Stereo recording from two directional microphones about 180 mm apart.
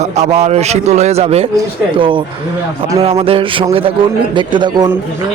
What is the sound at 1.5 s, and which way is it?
Speech, 30° right (ahead or behind).